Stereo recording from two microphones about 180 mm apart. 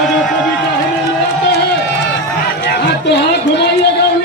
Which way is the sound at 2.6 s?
65° left (ahead or behind).